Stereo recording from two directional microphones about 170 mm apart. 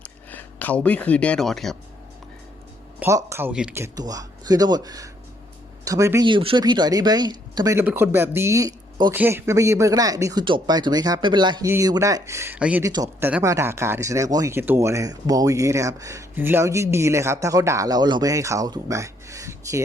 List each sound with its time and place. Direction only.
0.0 s speech: 10° left (ahead or behind)
3.0 s speech: 15° right (ahead or behind)
6.2 s speech: 30° right (ahead or behind)
9.1 s speech: 15° right (ahead or behind)
12.8 s speech: 20° right (ahead or behind)